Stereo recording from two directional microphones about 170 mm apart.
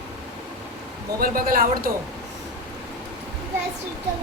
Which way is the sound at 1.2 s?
60° right (ahead or behind).